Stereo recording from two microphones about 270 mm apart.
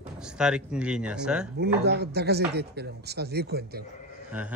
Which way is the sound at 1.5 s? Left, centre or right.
Right.